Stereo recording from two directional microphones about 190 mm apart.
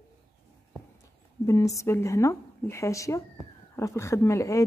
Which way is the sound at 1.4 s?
15° left (ahead or behind).